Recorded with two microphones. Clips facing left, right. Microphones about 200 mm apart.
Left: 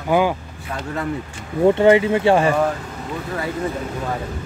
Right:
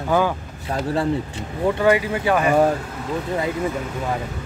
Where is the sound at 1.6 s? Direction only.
25° left (ahead or behind).